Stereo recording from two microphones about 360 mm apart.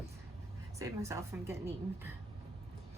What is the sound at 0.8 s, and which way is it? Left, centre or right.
A woman's voice, centre.